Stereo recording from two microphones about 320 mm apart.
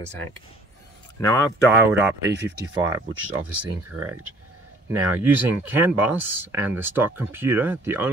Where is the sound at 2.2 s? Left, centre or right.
Right.